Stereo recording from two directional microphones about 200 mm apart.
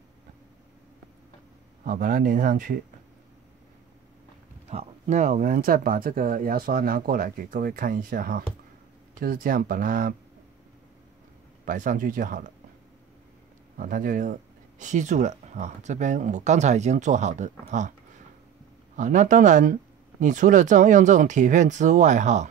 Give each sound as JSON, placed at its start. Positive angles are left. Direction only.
{"t": 1.9, "sound": "speech", "side_deg": -40}
{"t": 4.6, "sound": "speech", "side_deg": -35}
{"t": 11.6, "sound": "speech", "side_deg": -40}
{"t": 13.7, "sound": "speech", "side_deg": -40}
{"t": 18.9, "sound": "speech", "side_deg": -40}